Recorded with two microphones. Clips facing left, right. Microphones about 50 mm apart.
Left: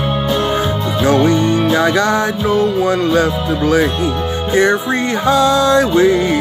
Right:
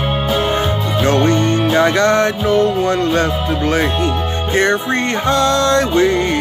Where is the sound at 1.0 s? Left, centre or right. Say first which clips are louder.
Left 2 dB; right.